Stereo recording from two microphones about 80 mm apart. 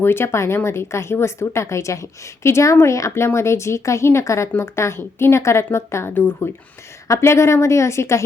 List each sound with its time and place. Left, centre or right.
0.0 s speech: left
7.1 s speech: left